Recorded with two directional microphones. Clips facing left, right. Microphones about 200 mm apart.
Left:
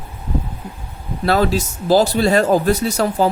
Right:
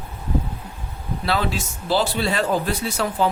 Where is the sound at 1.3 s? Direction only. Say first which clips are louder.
Left 8 dB; 40° left (ahead or behind).